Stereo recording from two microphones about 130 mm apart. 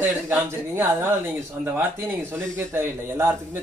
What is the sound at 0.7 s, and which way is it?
A man's voice, 15° right (ahead or behind).